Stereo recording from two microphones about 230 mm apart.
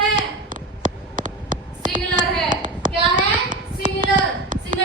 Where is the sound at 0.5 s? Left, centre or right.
Right.